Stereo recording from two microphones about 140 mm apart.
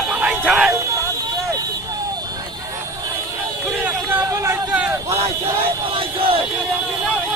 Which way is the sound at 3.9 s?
10° right (ahead or behind).